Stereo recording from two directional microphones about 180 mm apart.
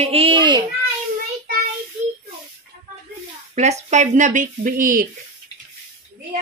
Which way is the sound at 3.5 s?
40° right (ahead or behind).